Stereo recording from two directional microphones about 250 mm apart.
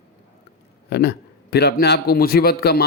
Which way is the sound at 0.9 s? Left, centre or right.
Left.